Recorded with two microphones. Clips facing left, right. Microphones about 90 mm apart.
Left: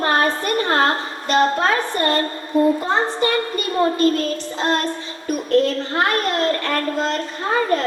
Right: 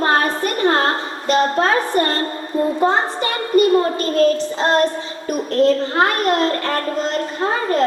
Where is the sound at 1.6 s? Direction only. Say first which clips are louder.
Right 3 dB; 35° right (ahead or behind).